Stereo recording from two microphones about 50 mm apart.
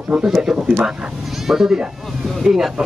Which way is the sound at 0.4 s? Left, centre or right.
Centre.